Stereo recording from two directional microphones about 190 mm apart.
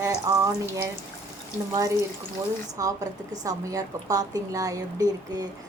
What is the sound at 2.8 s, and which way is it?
A woman's voice, 20° right (ahead or behind).